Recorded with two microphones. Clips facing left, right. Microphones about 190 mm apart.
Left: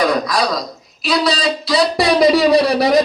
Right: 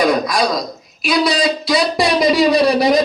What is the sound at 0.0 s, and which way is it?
Throat clearing, 15° right (ahead or behind).